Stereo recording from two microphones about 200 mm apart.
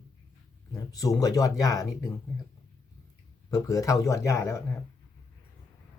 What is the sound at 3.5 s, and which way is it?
Speech, 15° left (ahead or behind).